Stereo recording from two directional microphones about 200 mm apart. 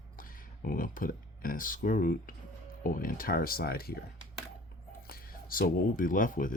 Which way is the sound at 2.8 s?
45° left (ahead or behind).